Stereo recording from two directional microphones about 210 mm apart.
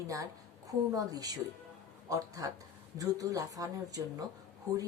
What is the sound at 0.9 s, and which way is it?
A woman's voice, 15° right (ahead or behind).